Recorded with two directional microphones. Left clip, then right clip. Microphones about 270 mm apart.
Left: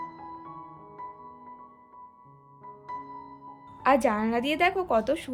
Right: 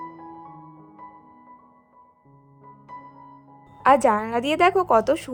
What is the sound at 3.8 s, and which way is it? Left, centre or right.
A woman's voice, right.